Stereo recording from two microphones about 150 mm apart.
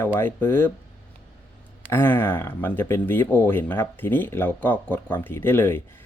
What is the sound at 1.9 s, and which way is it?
Speech, 15° left (ahead or behind).